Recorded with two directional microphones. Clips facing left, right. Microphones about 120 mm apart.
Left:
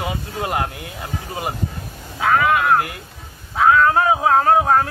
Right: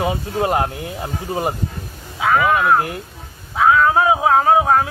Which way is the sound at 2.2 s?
5° right (ahead or behind).